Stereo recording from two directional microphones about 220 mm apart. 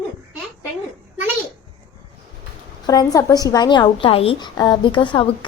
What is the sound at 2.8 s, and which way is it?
A woman's voice, 15° left (ahead or behind).